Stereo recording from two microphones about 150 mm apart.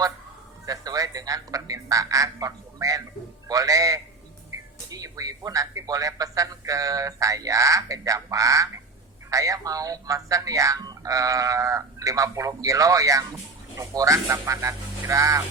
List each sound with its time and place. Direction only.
0.6 s speech: 25° right (ahead or behind)